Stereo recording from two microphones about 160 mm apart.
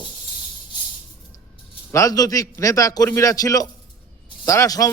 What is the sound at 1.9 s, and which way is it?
A man's voice, 20° left (ahead or behind).